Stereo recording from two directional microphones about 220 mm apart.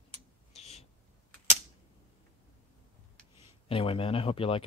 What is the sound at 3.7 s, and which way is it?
Speech, 25° left (ahead or behind).